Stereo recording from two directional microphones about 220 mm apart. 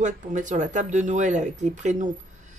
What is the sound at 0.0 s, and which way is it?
Speech, 35° right (ahead or behind).